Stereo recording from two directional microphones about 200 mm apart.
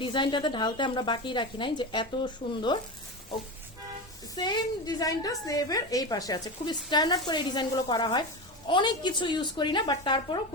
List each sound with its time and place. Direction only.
0.0 s a woman's voice: 25° left (ahead or behind)
2.4 s speech: 45° left (ahead or behind)
4.4 s a woman's voice: 20° left (ahead or behind)